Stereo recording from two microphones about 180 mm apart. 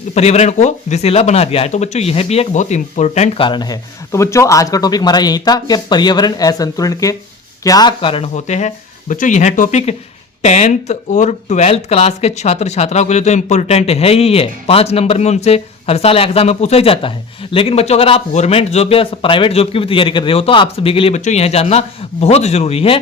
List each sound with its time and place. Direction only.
0.1 s speech: 35° left (ahead or behind)